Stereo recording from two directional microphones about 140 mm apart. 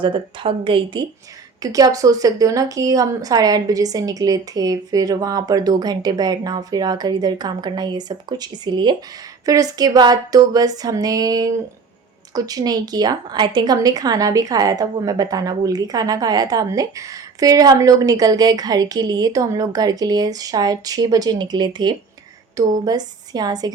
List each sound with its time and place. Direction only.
0.0 s a woman's voice: 35° right (ahead or behind)
1.6 s a woman's voice: 25° right (ahead or behind)